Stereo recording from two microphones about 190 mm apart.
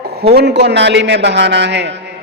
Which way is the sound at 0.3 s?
60° right (ahead or behind).